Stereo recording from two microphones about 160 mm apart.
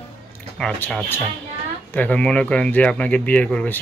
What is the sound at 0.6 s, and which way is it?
Speech, 5° left (ahead or behind).